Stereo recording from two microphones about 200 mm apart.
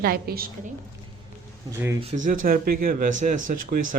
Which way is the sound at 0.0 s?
50° right (ahead or behind).